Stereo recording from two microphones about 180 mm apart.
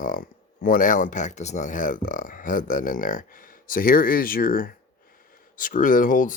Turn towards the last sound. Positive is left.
turn(degrees=45)  # may be behind; listen again after turning